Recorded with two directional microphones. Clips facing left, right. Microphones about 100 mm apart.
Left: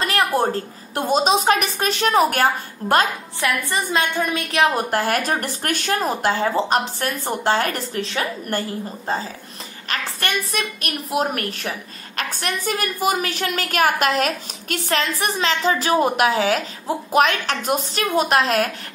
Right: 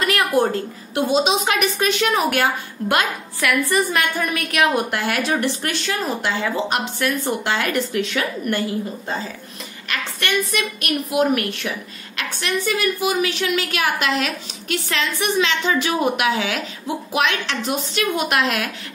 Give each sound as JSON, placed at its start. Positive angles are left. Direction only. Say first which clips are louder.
{"t": 0.0, "sound": "a woman's voice", "louder": "right 1 dB", "side_deg": 30}
{"t": 10.5, "sound": "a woman's voice", "louder": "right 3 dB", "side_deg": 35}